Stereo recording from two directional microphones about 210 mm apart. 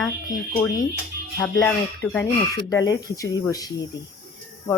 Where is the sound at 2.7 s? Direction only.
15° left (ahead or behind).